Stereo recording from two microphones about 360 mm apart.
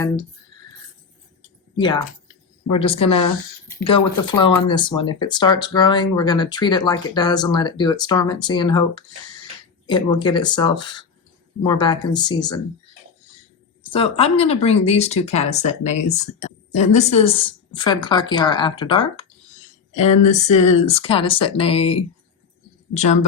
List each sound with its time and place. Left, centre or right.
1.7 s speech: centre
13.8 s speech: centre